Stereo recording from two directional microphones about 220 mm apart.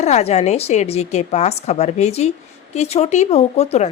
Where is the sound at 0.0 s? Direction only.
30° left (ahead or behind).